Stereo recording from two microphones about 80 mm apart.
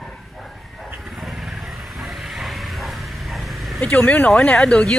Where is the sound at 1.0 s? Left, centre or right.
Centre.